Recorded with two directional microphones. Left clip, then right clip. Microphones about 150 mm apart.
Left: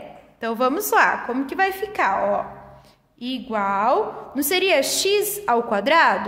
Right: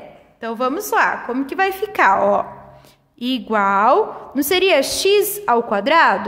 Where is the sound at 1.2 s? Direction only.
15° right (ahead or behind).